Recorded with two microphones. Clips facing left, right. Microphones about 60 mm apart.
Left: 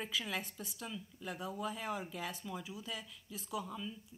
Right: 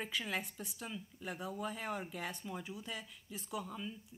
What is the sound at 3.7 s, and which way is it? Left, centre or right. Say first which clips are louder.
Speech: even; right.